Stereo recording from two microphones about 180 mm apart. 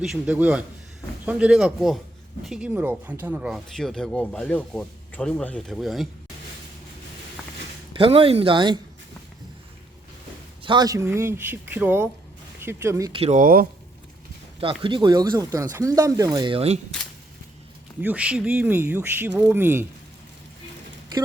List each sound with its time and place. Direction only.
0.0 s speech: 5° right (ahead or behind)
7.9 s speech: 30° right (ahead or behind)
10.6 s speech: 25° right (ahead or behind)
13.1 s speech: 35° right (ahead or behind)
13.4 s speech: 50° right (ahead or behind)
14.6 s speech: 30° right (ahead or behind)
18.0 s speech: 5° right (ahead or behind)